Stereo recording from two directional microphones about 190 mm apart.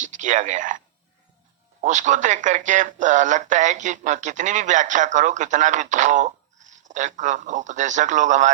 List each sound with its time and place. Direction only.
0.0 s speech: 40° right (ahead or behind)
1.8 s speech: 40° right (ahead or behind)